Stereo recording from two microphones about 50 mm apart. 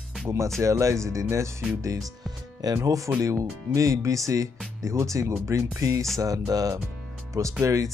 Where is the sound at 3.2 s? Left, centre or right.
Right.